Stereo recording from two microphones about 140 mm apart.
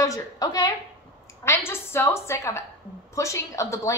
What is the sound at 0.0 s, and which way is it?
A woman's voice, 25° left (ahead or behind).